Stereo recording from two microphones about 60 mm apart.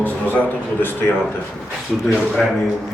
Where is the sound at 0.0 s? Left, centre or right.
Left.